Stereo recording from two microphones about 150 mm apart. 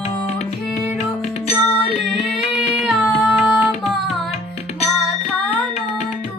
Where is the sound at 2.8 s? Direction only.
Centre (ahead or behind).